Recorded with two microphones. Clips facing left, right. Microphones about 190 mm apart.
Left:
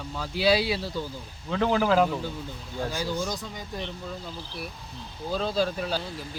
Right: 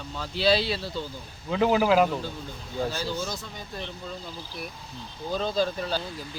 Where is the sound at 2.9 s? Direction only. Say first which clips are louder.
Left 1 dB; 15° left (ahead or behind).